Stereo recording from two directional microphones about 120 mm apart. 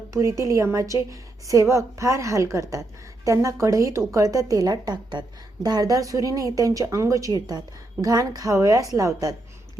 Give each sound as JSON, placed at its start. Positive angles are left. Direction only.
{"t": 0.1, "sound": "a woman's voice", "side_deg": -25}